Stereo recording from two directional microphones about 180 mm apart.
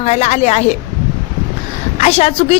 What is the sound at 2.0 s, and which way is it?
Speech, 35° left (ahead or behind).